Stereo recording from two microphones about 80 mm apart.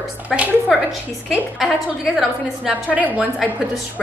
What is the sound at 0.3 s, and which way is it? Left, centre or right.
Speech, centre.